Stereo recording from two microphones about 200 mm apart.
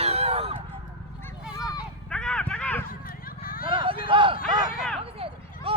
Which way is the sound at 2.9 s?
45° left (ahead or behind).